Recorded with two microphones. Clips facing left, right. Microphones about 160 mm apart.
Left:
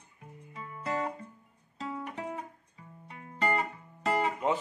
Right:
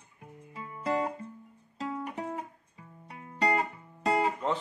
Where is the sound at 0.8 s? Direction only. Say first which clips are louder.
Right 3 dB; 30° right (ahead or behind).